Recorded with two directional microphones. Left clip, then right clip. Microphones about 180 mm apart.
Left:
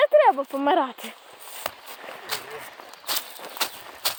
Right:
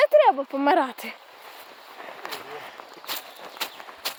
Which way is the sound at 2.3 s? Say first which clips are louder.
Left 7 dB; 60° left (ahead or behind).